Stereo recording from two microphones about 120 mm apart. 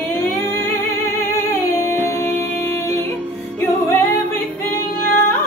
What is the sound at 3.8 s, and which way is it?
Singing, 20° left (ahead or behind).